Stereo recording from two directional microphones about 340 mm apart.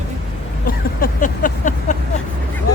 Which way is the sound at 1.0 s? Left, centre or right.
Left.